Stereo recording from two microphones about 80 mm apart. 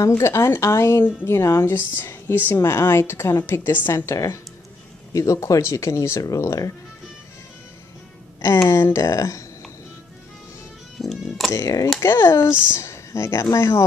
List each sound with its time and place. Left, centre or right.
0.2 s a woman's voice: left
3.9 s a woman's voice: left
8.5 s a woman's voice: left
11.0 s speech: centre
11.5 s a woman's voice: left